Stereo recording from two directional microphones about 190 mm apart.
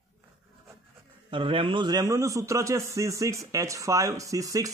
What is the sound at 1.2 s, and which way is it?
A man's voice, 25° right (ahead or behind).